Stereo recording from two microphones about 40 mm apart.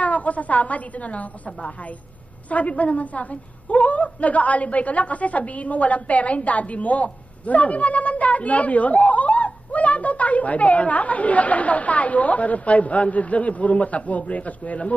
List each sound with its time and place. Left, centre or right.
0.0 s a woman's voice: left